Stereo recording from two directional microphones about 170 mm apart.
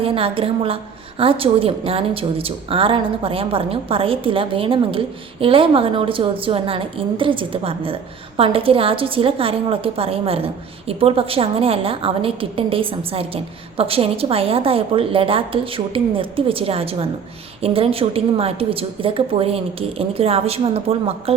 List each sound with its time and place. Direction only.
0.0 s a woman's voice: 30° right (ahead or behind)